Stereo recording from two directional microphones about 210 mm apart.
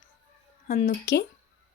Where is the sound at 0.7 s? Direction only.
45° left (ahead or behind).